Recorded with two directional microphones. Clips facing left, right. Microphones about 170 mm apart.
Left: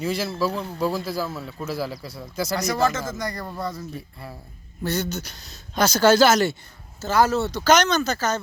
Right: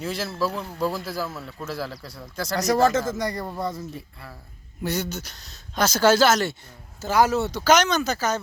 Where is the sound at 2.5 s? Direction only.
40° right (ahead or behind); by 4.0 s 20° right (ahead or behind).